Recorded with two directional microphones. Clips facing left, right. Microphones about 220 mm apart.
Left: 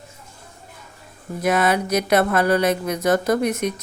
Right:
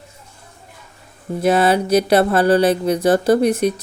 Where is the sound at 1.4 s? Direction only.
30° right (ahead or behind).